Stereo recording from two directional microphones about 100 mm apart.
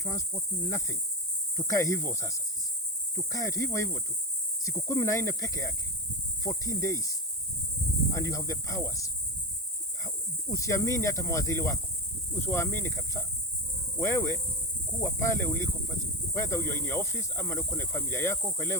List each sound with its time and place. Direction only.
0.0 s speech: 30° left (ahead or behind)
10.5 s speech: 35° left (ahead or behind)